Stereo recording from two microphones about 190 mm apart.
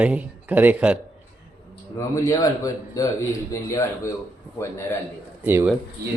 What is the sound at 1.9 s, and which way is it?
Speech, 15° left (ahead or behind).